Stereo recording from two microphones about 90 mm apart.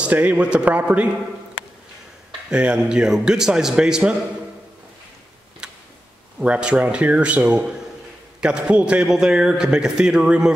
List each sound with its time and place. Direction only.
0.0 s a man's voice: 15° right (ahead or behind)
2.5 s a man's voice: 10° right (ahead or behind)
5.6 s tick-tock: 10° right (ahead or behind)
6.4 s a man's voice: 15° right (ahead or behind)